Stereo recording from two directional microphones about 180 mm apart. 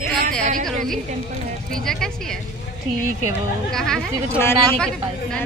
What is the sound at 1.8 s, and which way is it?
Speech, centre (ahead or behind).